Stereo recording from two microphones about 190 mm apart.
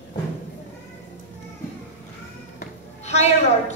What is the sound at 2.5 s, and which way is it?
Music, 35° left (ahead or behind).